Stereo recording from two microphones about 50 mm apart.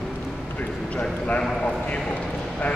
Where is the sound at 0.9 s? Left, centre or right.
Left.